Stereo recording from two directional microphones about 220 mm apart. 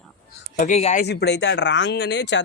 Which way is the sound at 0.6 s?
30° left (ahead or behind).